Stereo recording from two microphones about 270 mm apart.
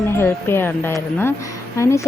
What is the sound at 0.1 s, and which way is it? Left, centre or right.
Speech, centre.